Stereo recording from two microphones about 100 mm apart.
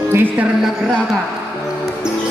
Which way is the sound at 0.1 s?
20° right (ahead or behind).